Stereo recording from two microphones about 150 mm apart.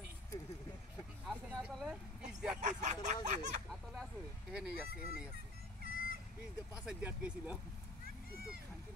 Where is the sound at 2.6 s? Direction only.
55° right (ahead or behind).